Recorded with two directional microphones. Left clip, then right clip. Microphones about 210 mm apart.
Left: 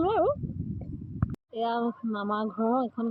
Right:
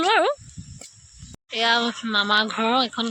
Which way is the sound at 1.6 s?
30° right (ahead or behind).